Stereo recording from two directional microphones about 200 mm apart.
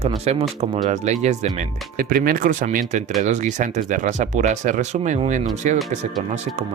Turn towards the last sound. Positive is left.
turn(degrees=-40)  # may be behind; listen again after turning